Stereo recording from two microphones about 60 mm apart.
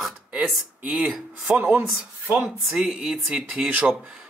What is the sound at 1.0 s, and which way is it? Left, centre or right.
Speech, centre.